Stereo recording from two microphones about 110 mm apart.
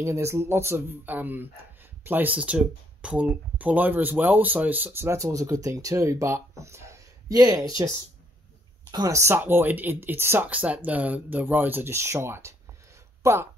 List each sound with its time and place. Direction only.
0.0 s speech: 25° right (ahead or behind)